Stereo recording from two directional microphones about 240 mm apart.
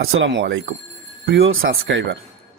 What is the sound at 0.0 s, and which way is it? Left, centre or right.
Speech, right.